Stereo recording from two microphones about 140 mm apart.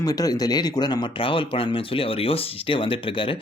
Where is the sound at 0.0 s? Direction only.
25° left (ahead or behind).